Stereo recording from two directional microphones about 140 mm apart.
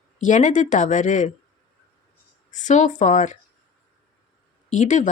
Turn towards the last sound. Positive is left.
turn(degrees=60)  # may be behind; listen again after turning